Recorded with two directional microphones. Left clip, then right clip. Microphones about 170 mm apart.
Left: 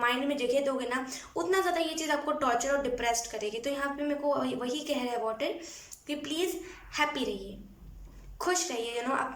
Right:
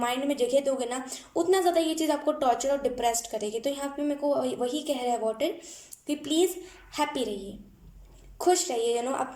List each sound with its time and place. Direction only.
0.0 s a woman's voice: 25° right (ahead or behind)
8.4 s a woman's voice: 30° right (ahead or behind)